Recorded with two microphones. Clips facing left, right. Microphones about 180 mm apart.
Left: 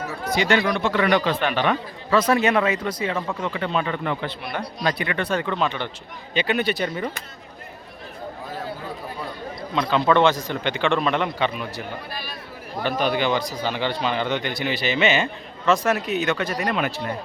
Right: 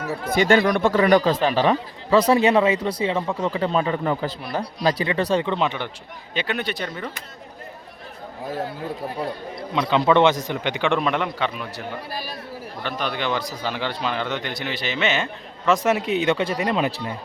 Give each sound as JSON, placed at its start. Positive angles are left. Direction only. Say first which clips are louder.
{"t": 0.3, "sound": "speech", "louder": "right 3 dB", "side_deg": -50}
{"t": 5.6, "sound": "speech", "louder": "even", "side_deg": -10}
{"t": 6.3, "sound": "speech", "louder": "left 4 dB", "side_deg": 0}
{"t": 9.7, "sound": "speech", "louder": "right 1 dB", "side_deg": -10}
{"t": 11.0, "sound": "a man's voice", "louder": "left 1 dB", "side_deg": -5}
{"t": 12.1, "sound": "speech", "louder": "right 3 dB", "side_deg": -40}
{"t": 12.8, "sound": "a man's voice", "louder": "left 5 dB", "side_deg": 5}
{"t": 15.6, "sound": "speech", "louder": "right 1 dB", "side_deg": -20}